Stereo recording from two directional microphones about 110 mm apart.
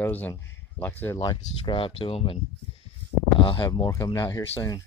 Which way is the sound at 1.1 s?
40° left (ahead or behind).